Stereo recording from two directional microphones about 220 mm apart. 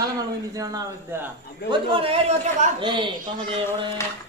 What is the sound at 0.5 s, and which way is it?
Speech, 15° right (ahead or behind).